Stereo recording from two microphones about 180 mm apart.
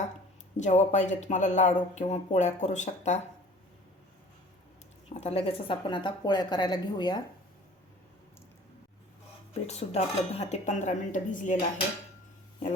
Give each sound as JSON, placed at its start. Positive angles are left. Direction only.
{"t": 0.5, "sound": "speech", "side_deg": 40}
{"t": 5.0, "sound": "speech", "side_deg": 35}
{"t": 9.5, "sound": "speech", "side_deg": 35}